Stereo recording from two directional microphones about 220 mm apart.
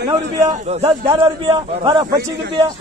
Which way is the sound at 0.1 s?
15° right (ahead or behind).